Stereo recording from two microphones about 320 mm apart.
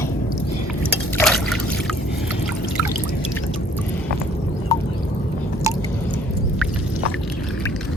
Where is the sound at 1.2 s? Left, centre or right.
Centre.